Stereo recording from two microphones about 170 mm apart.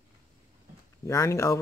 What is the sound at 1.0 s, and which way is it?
Speech, 15° left (ahead or behind).